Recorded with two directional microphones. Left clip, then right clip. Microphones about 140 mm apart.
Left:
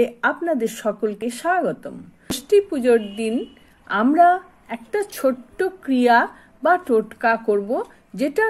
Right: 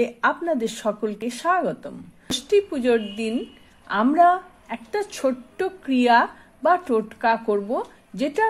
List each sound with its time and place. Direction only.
0.0 s a woman's voice: 15° left (ahead or behind)